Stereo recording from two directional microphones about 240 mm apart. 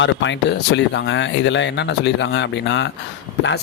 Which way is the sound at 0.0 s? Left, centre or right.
Left.